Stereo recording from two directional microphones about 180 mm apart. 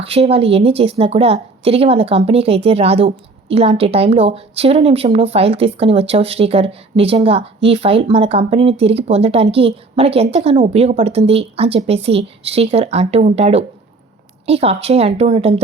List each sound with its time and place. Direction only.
0.0 s a woman's voice: 35° right (ahead or behind)